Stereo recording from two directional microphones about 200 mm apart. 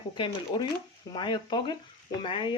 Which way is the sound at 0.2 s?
25° left (ahead or behind).